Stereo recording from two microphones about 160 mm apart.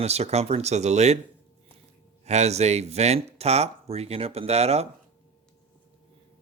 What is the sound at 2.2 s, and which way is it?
Speech, 45° right (ahead or behind).